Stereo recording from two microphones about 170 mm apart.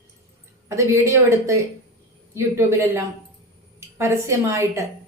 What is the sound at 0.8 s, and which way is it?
A woman's voice, 15° right (ahead or behind).